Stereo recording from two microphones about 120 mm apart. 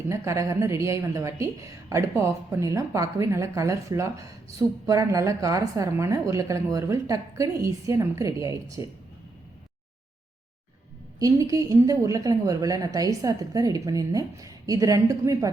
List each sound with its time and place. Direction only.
0.1 s a woman's voice: 25° right (ahead or behind)
11.2 s a woman's voice: 30° right (ahead or behind)